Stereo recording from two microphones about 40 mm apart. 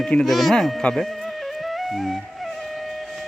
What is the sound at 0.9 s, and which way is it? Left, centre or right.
Music, centre.